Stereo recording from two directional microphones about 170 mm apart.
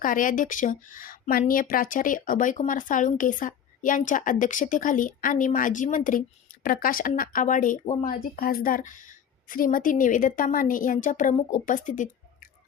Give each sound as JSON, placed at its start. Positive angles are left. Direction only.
{"t": 0.0, "sound": "a woman's voice", "side_deg": 50}